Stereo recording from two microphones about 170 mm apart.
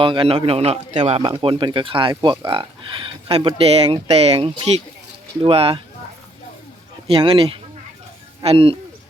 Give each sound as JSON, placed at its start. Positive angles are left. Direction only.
{"t": 0.0, "sound": "speech", "side_deg": -30}
{"t": 7.1, "sound": "speech", "side_deg": -30}